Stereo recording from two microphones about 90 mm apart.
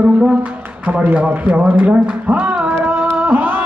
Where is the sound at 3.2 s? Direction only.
20° right (ahead or behind).